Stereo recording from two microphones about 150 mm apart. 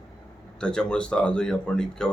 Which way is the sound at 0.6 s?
5° left (ahead or behind).